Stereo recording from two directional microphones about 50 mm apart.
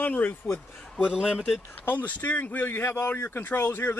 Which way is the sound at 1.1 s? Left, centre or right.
Centre.